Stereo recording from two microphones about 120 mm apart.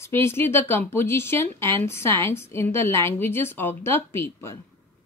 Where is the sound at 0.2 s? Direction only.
20° left (ahead or behind).